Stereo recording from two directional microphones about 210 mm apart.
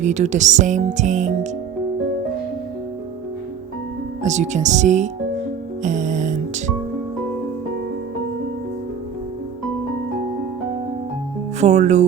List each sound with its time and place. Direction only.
0.0 s speech: 35° right (ahead or behind)
4.2 s speech: 35° right (ahead or behind)
5.8 s music: 35° right (ahead or behind)
11.6 s speech: 35° right (ahead or behind)